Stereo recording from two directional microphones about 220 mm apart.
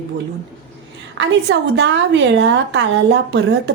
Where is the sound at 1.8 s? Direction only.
55° right (ahead or behind).